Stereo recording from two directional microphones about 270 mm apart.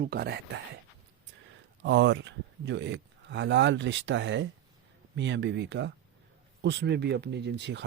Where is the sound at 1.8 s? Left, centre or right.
Right.